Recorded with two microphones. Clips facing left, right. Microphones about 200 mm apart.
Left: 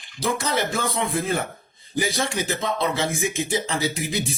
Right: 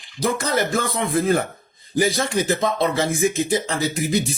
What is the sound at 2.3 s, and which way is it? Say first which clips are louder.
Speech: right 5 dB; 35° right (ahead or behind).